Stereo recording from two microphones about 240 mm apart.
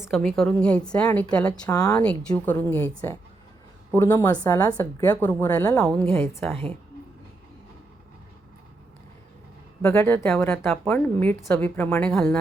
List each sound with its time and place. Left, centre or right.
0.3 s a woman's voice: centre
9.8 s a woman's voice: centre